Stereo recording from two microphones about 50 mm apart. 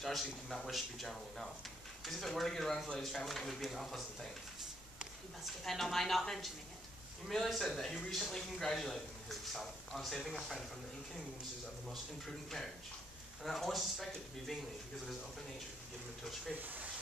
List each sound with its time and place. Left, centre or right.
0.0 s speech: centre
5.6 s speech: centre
13.4 s speech: centre
16.5 s speech: right